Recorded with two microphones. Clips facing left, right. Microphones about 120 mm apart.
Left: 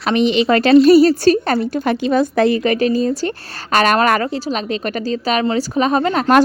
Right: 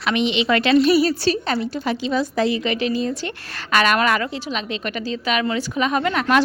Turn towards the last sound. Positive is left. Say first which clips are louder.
# left 5 dB
turn(degrees=35)  # may be behind; listen again after turning